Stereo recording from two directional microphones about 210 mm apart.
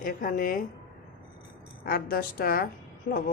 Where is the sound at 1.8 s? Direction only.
45° left (ahead or behind).